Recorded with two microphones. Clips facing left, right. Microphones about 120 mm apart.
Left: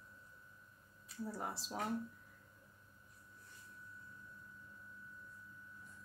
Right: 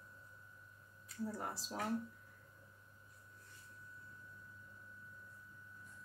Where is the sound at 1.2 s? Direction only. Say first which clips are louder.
Right 1 dB; 5° left (ahead or behind).